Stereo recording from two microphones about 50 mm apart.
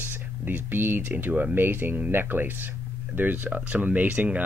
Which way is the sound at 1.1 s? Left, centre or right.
Right.